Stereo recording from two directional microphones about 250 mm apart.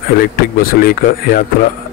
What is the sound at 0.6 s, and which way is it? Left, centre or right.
Speech, left.